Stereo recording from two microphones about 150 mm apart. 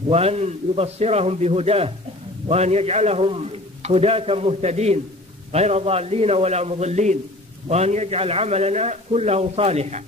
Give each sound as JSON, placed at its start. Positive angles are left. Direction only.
{"t": 0.1, "sound": "a man's voice", "side_deg": -45}